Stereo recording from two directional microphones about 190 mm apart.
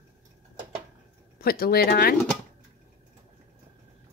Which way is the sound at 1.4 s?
55° left (ahead or behind).